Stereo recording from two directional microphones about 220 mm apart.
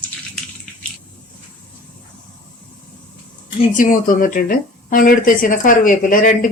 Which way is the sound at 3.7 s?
40° left (ahead or behind).